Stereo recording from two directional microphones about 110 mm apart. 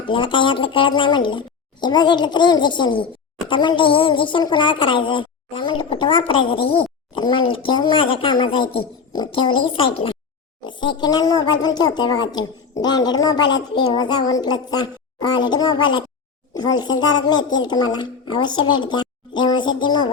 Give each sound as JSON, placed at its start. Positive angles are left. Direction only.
{"t": 0.0, "sound": "a woman's voice", "side_deg": 50}
{"t": 10.6, "sound": "a woman's voice", "side_deg": 45}